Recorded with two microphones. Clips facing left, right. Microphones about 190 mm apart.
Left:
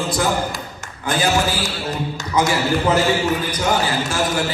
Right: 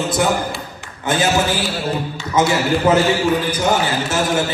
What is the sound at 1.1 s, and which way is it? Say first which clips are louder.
A man's voice: right 2 dB; 25° right (ahead or behind).